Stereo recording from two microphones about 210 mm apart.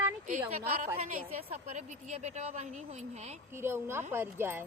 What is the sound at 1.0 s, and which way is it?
A woman's voice, 35° right (ahead or behind).